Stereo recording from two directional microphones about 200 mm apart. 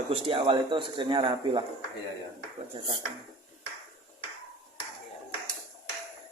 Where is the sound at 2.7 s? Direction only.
25° right (ahead or behind).